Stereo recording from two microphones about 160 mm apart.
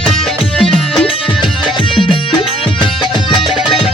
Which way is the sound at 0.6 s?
Centre (ahead or behind).